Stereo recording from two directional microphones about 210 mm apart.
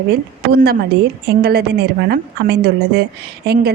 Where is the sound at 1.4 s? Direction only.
45° right (ahead or behind).